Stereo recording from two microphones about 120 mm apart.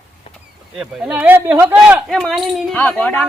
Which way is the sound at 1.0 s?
10° right (ahead or behind).